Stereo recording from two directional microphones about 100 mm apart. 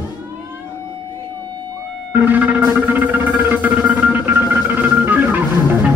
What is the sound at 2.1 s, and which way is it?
Music, 20° right (ahead or behind).